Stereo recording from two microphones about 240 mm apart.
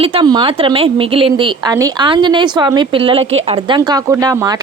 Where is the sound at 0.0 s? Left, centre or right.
Right.